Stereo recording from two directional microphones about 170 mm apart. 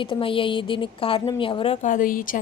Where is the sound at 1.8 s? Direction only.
50° left (ahead or behind).